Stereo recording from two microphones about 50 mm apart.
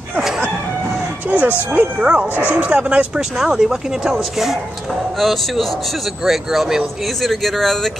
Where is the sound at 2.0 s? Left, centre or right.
Centre.